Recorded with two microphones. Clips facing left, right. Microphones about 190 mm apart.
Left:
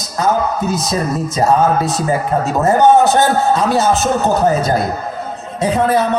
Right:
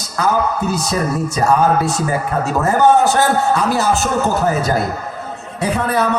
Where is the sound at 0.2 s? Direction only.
20° left (ahead or behind).